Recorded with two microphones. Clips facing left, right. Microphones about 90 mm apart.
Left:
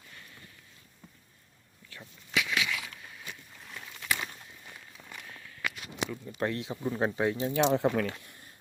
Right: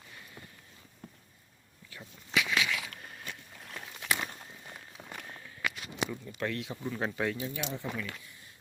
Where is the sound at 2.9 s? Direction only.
50° right (ahead or behind).